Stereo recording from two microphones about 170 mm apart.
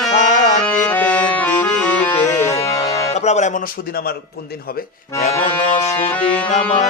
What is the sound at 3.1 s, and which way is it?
A man's voice, 40° left (ahead or behind).